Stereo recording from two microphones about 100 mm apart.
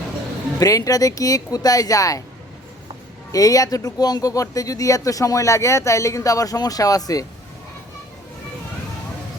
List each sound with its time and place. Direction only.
0.6 s speech: 35° left (ahead or behind)
3.3 s speech: 35° left (ahead or behind)